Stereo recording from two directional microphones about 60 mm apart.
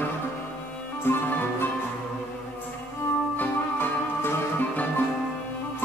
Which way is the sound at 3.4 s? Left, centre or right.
Left.